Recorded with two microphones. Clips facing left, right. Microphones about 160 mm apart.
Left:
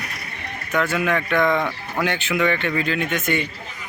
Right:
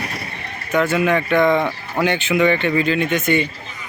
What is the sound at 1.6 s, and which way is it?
Speech, 25° right (ahead or behind).